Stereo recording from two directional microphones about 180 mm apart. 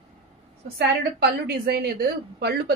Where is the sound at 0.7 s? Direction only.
65° right (ahead or behind).